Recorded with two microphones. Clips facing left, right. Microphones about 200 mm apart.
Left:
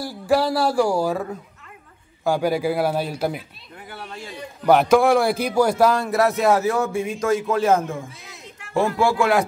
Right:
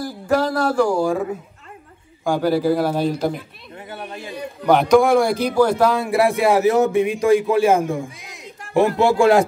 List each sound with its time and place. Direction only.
0.0 s a man's voice: 10° left (ahead or behind)
2.2 s a man's voice: 10° left (ahead or behind)
3.9 s a sound: 20° right (ahead or behind)
4.6 s speech: 5° left (ahead or behind)
5.9 s a man's voice: 10° right (ahead or behind); by 9.4 s 30° right (ahead or behind)